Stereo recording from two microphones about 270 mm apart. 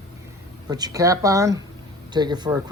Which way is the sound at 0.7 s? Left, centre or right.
Centre.